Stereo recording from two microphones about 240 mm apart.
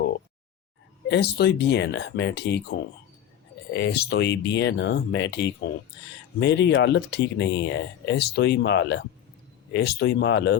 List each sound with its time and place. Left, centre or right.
1.0 s speech: left